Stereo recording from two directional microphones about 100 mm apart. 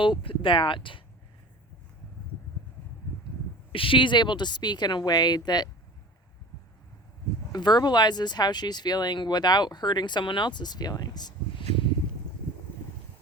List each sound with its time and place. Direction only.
0.0 s speech: 60° left (ahead or behind)
3.7 s speech: 60° left (ahead or behind); by 5.6 s 45° left (ahead or behind)
7.5 s speech: 45° left (ahead or behind)